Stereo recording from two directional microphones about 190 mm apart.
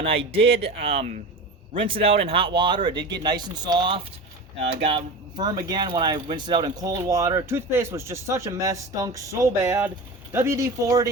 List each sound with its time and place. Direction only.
0.0 s speech: 30° right (ahead or behind)